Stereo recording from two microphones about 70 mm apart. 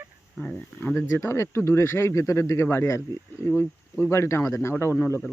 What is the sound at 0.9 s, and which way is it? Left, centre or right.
Speech, left.